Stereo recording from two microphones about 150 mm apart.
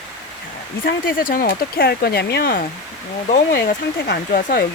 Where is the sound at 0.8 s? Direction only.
70° left (ahead or behind); by 3.7 s 90° left.